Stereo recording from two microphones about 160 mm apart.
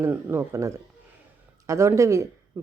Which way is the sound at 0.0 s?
15° right (ahead or behind).